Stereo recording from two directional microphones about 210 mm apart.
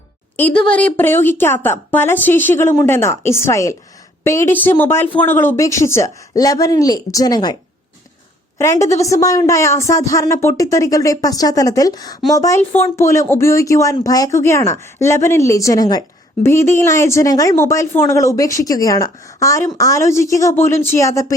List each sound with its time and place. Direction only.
0.3 s speech: 5° left (ahead or behind)
8.5 s speech: 15° left (ahead or behind)